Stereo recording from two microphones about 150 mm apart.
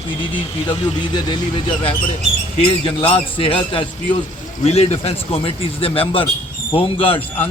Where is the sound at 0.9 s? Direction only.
30° left (ahead or behind).